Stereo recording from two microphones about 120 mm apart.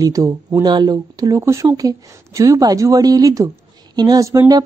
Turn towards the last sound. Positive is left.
turn(degrees=-25)  # may be behind; listen again after turning